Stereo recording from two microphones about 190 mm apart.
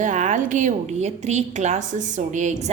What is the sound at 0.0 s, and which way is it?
A woman's voice, 40° right (ahead or behind).